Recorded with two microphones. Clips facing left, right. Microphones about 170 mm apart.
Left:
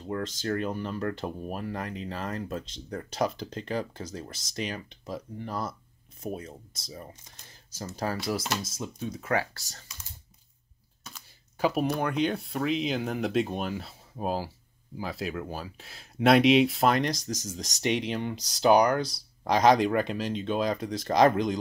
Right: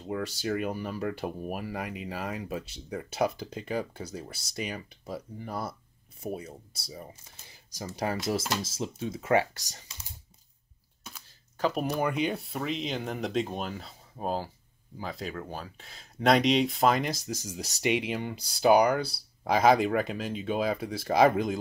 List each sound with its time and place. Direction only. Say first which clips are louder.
0.1 s speech: even; 10° right (ahead or behind)
8.6 s speech: right 2 dB; 30° right (ahead or behind)
11.5 s speech: left 2 dB; 5° left (ahead or behind)